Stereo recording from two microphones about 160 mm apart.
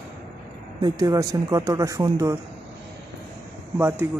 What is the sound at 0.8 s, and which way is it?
Speech, 25° right (ahead or behind).